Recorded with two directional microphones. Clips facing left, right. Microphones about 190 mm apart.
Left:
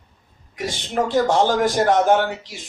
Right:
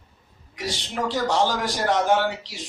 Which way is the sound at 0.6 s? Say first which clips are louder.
Left 5 dB; 50° left (ahead or behind).